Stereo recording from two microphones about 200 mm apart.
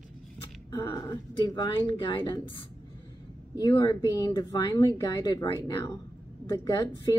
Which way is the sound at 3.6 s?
20° left (ahead or behind).